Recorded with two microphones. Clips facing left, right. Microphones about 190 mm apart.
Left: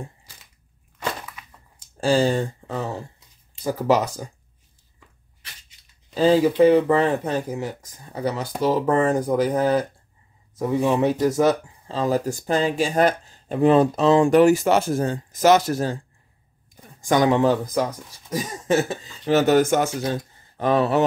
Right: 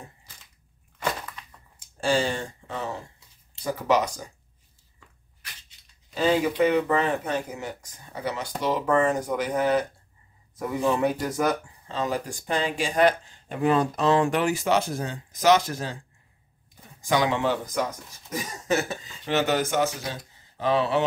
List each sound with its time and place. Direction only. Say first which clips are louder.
1.8 s speech: left 5 dB; 40° left (ahead or behind)
6.1 s speech: left 6 dB; 35° left (ahead or behind)
14.4 s speech: left 7 dB; 45° left (ahead or behind)
17.0 s speech: left 6 dB; 45° left (ahead or behind)